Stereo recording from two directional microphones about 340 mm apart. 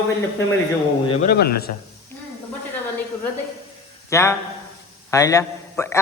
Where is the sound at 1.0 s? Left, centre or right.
Centre.